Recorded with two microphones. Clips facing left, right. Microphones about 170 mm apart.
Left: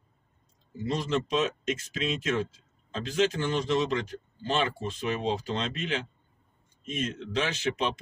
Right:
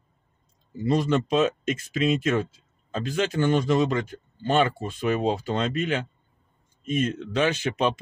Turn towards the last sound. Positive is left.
turn(degrees=-55)  # may be behind; listen again after turning